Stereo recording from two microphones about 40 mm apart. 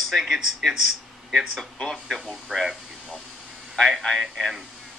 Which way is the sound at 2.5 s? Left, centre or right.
Centre.